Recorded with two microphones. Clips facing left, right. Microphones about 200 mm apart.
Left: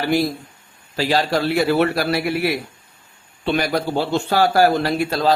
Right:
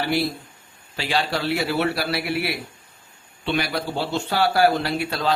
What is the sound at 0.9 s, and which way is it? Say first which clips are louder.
A man's voice: left 6 dB; 40° left (ahead or behind).